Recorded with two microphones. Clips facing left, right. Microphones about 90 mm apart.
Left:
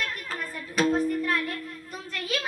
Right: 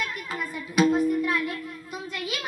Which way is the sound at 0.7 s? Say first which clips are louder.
Right 3 dB; 10° right (ahead or behind).